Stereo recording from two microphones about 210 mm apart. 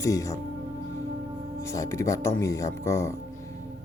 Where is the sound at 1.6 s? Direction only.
15° left (ahead or behind).